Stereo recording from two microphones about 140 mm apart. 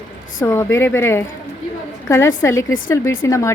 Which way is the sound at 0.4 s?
20° left (ahead or behind).